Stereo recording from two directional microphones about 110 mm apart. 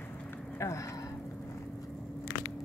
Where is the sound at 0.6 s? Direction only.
25° left (ahead or behind).